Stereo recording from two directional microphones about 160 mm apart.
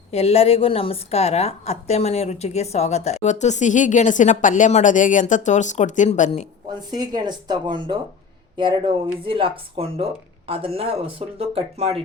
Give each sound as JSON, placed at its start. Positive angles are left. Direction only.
{"t": 0.1, "sound": "a woman's voice", "side_deg": 40}
{"t": 6.9, "sound": "speech", "side_deg": -25}